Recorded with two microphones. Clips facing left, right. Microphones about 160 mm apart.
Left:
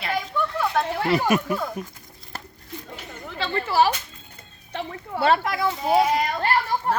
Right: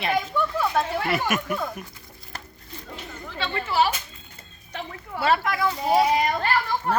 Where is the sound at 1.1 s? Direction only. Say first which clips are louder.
Left 7 dB; 30° left (ahead or behind).